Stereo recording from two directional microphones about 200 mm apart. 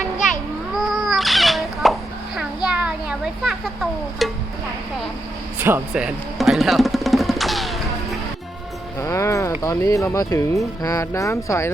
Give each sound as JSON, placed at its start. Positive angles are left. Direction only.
{"t": 0.8, "sound": "cat", "side_deg": 0}
{"t": 2.6, "sound": "a sound", "side_deg": -5}
{"t": 5.6, "sound": "music", "side_deg": -10}
{"t": 9.0, "sound": "music", "side_deg": 15}
{"t": 9.6, "sound": "speech", "side_deg": 15}